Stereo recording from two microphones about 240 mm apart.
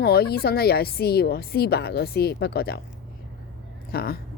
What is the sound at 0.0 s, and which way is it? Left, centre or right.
Speech, left.